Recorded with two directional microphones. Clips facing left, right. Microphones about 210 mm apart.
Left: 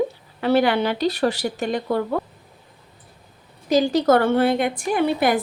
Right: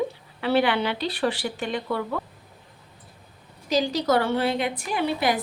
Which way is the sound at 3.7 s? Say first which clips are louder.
Left 6 dB; 50° left (ahead or behind).